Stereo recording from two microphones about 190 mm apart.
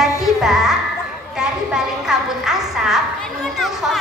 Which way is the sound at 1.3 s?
5° right (ahead or behind).